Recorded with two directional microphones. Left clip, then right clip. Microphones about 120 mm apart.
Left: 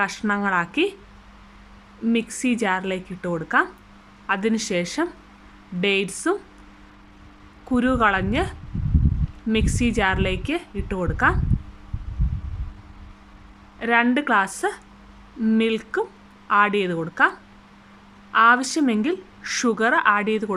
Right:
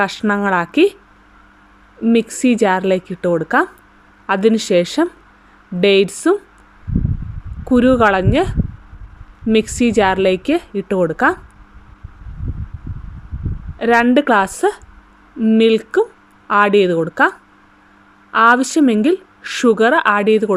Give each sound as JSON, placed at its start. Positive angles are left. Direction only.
{"t": 0.0, "sound": "a woman's voice", "side_deg": -35}
{"t": 2.1, "sound": "a woman's voice", "side_deg": -35}
{"t": 7.7, "sound": "a woman's voice", "side_deg": -35}
{"t": 13.7, "sound": "a woman's voice", "side_deg": -30}
{"t": 15.4, "sound": "speech", "side_deg": -20}
{"t": 15.6, "sound": "a woman's voice", "side_deg": -35}